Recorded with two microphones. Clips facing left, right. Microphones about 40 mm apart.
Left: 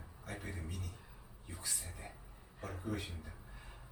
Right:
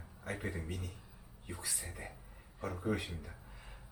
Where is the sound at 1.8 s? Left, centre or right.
Right.